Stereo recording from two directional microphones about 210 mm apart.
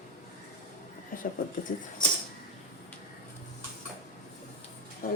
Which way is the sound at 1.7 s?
35° left (ahead or behind).